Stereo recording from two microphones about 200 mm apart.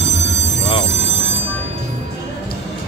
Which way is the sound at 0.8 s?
30° right (ahead or behind).